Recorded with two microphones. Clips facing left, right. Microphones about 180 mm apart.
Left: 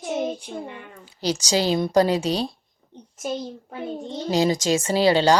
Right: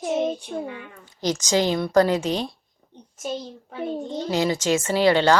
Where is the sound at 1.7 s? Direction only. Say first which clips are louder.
Left 1 dB; 20° left (ahead or behind).